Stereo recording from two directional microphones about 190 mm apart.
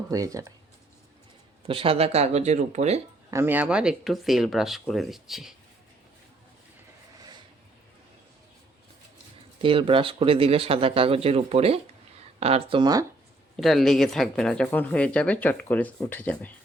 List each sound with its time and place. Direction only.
0.1 s speech: 15° right (ahead or behind)
1.6 s speech: 30° right (ahead or behind)
3.2 s speech: 15° right (ahead or behind)
9.6 s speech: 25° right (ahead or behind)
13.6 s speech: centre (ahead or behind)